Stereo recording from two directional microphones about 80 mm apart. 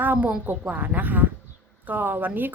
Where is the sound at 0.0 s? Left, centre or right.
Centre.